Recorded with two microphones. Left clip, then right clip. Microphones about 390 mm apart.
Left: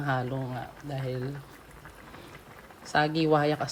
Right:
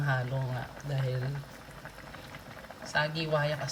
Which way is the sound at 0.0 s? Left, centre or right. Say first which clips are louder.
Left 3 dB; centre.